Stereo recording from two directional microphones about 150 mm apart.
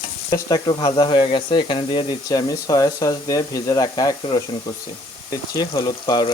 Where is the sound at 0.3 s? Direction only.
25° left (ahead or behind).